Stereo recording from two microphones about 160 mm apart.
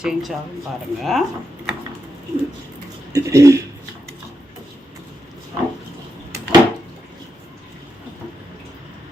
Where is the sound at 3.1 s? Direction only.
20° right (ahead or behind).